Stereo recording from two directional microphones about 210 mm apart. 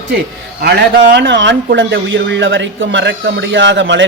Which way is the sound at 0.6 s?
55° right (ahead or behind).